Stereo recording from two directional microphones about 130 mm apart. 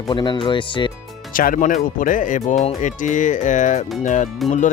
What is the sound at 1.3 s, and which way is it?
Speech, 90° left.